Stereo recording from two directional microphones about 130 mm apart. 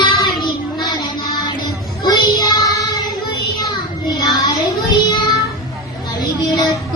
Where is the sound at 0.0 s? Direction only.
30° left (ahead or behind).